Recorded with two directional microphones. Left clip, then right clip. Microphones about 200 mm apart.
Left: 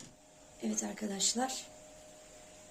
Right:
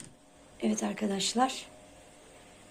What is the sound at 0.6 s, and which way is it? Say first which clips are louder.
Speech: right 6 dB; 10° right (ahead or behind).